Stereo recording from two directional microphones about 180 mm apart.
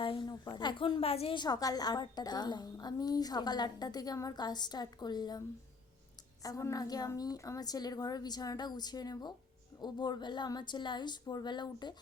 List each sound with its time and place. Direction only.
0.0 s a woman's voice: 25° left (ahead or behind)
6.4 s a woman's voice: 20° left (ahead or behind)